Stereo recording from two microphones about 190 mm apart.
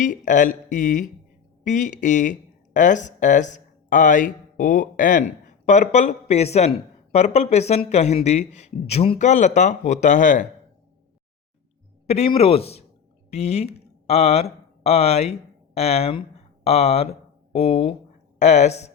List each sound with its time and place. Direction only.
0.0 s speech: 40° left (ahead or behind)
12.0 s speech: 35° left (ahead or behind)